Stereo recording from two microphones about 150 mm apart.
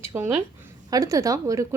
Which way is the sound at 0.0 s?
20° right (ahead or behind).